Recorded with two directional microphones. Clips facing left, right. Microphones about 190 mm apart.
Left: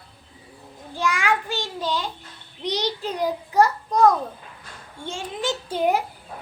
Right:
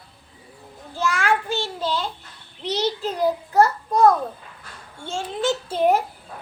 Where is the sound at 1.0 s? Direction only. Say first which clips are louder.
Right 1 dB; 15° left (ahead or behind).